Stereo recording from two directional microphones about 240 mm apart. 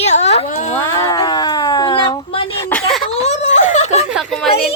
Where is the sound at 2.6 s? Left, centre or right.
Centre.